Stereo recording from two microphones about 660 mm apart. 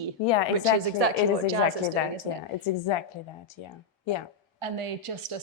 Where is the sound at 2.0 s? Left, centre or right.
Left.